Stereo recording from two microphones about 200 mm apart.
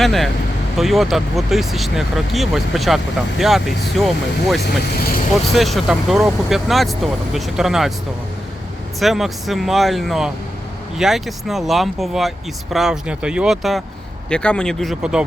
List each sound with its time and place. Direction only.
0.0 s speech: centre (ahead or behind)
4.6 s speech: 50° left (ahead or behind)
5.5 s speech: centre (ahead or behind)
9.0 s speech: centre (ahead or behind)